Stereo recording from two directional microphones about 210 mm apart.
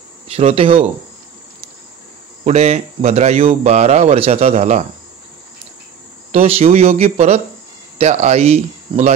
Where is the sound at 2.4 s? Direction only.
30° right (ahead or behind).